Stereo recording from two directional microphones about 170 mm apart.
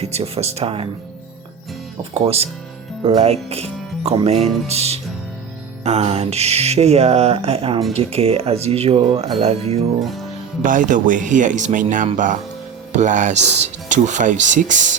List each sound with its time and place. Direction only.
0.0 s speech: 35° right (ahead or behind)
2.1 s speech: 35° right (ahead or behind)
10.0 s speech: centre (ahead or behind)
10.6 s speech: 50° right (ahead or behind)